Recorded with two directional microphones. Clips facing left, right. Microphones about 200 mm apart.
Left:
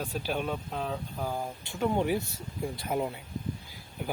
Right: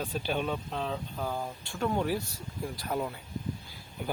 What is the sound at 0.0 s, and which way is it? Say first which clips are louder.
Speech: even; 5° left (ahead or behind).